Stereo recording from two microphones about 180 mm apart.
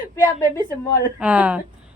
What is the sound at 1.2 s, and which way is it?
Speech, 5° right (ahead or behind).